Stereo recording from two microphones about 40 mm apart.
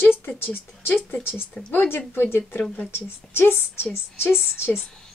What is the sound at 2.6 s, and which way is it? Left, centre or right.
Speech, centre.